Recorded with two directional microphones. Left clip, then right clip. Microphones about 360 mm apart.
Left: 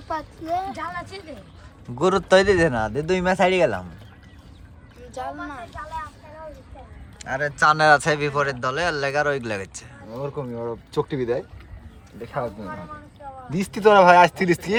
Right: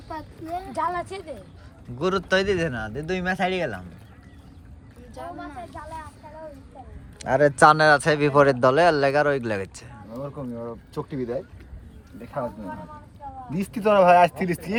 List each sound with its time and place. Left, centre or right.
0.1 s speech: centre
0.7 s a woman's voice: centre
2.0 s speech: centre
5.1 s speech: centre
5.7 s a woman's voice: centre
7.2 s speech: centre
10.2 s speech: left
13.5 s speech: left